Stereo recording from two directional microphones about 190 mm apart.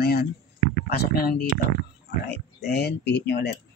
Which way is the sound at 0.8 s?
55° left (ahead or behind).